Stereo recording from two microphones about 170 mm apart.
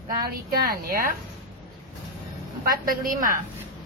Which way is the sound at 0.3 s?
65° right (ahead or behind).